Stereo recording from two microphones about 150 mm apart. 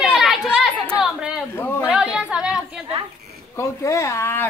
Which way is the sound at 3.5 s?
20° left (ahead or behind).